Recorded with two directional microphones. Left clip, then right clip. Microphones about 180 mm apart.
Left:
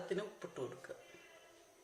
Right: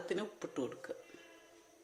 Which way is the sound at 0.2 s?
60° right (ahead or behind).